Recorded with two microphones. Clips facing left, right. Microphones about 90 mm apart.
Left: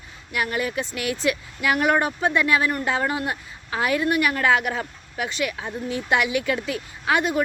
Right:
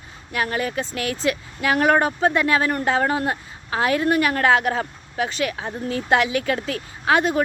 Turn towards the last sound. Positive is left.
turn(degrees=-35)  # may be behind; listen again after turning